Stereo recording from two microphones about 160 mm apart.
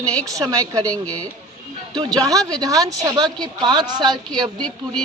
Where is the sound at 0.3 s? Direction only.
20° right (ahead or behind).